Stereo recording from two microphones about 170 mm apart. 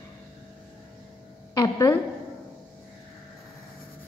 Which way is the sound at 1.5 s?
20° left (ahead or behind).